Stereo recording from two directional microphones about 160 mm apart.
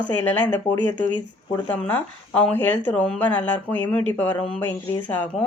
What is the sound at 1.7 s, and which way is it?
A woman's voice, 10° left (ahead or behind).